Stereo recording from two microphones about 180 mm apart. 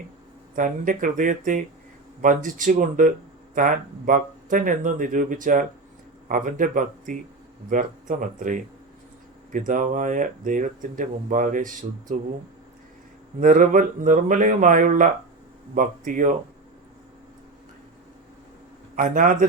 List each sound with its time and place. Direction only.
0.5 s speech: 45° right (ahead or behind)
13.4 s speech: 45° right (ahead or behind)
18.9 s speech: 45° right (ahead or behind)